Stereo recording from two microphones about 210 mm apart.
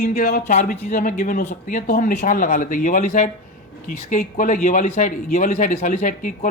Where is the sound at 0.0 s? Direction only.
35° left (ahead or behind).